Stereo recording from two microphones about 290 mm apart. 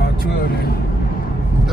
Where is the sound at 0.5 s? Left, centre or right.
Left.